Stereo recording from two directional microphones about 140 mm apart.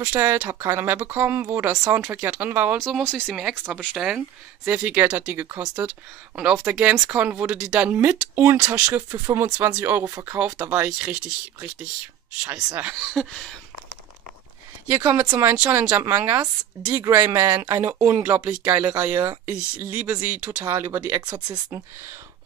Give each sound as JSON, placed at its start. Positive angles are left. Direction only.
{"t": 0.0, "sound": "speech", "side_deg": -15}
{"t": 2.8, "sound": "speech", "side_deg": 5}
{"t": 3.9, "sound": "speech", "side_deg": -5}
{"t": 12.5, "sound": "speech", "side_deg": -25}
{"t": 12.8, "sound": "speech", "side_deg": -5}
{"t": 14.9, "sound": "speech", "side_deg": -20}